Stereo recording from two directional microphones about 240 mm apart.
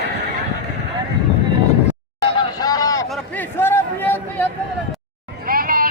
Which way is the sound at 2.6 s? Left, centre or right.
Centre.